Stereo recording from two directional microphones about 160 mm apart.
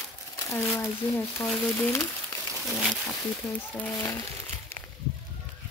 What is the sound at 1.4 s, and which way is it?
Speech, 10° left (ahead or behind).